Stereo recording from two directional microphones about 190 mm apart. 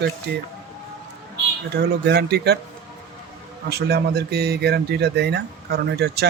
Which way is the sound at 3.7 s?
55° right (ahead or behind).